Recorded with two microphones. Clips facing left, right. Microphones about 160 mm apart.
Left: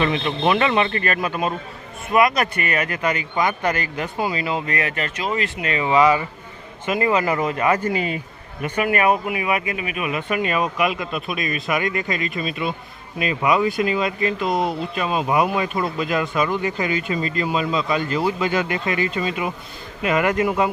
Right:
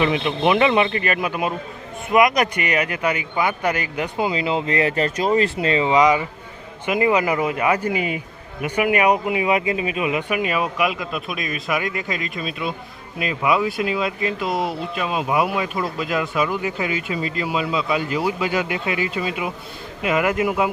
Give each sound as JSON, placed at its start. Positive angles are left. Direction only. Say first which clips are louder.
{"t": 0.0, "sound": "speech", "louder": "right 1 dB", "side_deg": -15}